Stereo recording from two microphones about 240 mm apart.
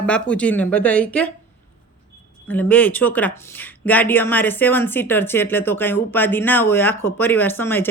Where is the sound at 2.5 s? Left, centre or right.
Centre.